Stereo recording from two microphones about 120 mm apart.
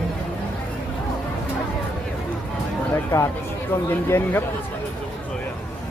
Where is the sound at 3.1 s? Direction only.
25° left (ahead or behind).